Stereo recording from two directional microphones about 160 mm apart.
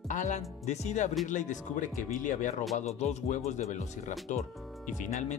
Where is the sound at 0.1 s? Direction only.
50° left (ahead or behind).